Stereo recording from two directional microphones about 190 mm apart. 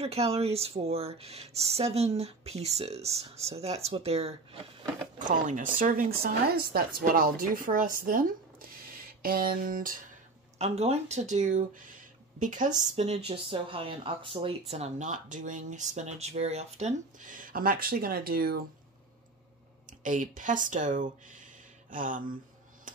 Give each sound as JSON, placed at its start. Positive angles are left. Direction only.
{"t": 0.0, "sound": "a woman's voice", "side_deg": -35}
{"t": 10.6, "sound": "speech", "side_deg": -35}
{"t": 19.9, "sound": "a woman's voice", "side_deg": -45}